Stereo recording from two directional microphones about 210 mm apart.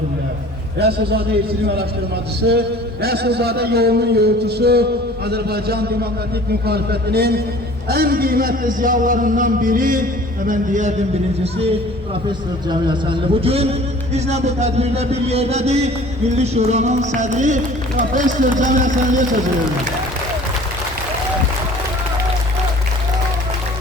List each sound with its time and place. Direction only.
0.8 s a sound: 50° right (ahead or behind)
7.9 s a man's voice: 45° right (ahead or behind)
12.6 s a man's voice: 20° right (ahead or behind); by 19.4 s 40° right (ahead or behind)